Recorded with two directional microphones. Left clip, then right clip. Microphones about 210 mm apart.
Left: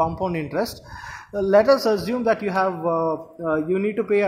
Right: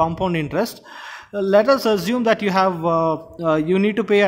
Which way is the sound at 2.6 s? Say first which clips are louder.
Right 4 dB; 50° right (ahead or behind).